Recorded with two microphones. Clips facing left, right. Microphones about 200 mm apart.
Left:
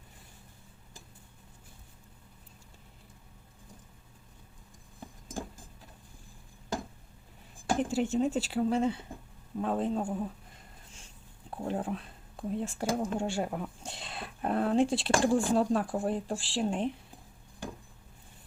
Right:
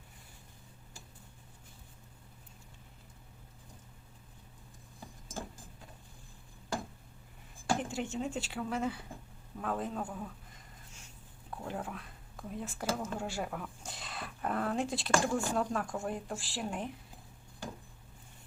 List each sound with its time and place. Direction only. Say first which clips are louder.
7.9 s a man's voice: left 8 dB; 35° left (ahead or behind)
11.5 s speech: left 6 dB; 30° left (ahead or behind)